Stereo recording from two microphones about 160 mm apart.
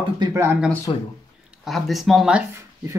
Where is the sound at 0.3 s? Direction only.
20° right (ahead or behind).